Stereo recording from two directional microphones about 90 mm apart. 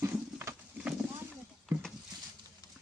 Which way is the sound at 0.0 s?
30° right (ahead or behind).